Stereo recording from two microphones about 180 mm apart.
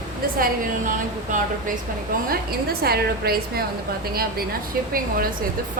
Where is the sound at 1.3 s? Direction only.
45° right (ahead or behind).